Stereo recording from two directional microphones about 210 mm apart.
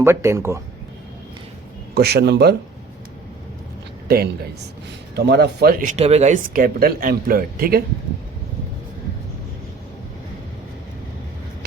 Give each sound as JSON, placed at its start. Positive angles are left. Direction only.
{"t": 0.0, "sound": "speech", "side_deg": -10}
{"t": 2.0, "sound": "speech", "side_deg": -50}
{"t": 5.1, "sound": "speech", "side_deg": -50}